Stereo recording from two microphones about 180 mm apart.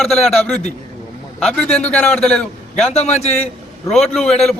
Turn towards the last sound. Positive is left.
turn(degrees=0)  # may be behind; listen again after turning